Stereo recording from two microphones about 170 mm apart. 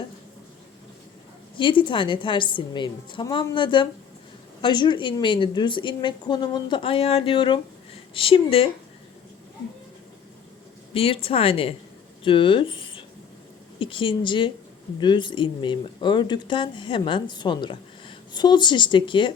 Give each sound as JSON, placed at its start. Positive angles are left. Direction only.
{"t": 1.5, "sound": "speech", "side_deg": 30}
{"t": 10.9, "sound": "speech", "side_deg": 35}